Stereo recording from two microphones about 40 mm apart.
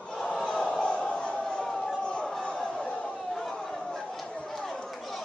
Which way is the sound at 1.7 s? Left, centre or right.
Centre.